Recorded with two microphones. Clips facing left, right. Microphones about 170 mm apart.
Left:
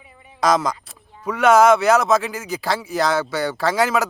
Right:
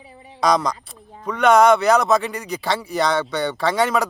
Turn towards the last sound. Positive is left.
turn(degrees=0)  # may be behind; listen again after turning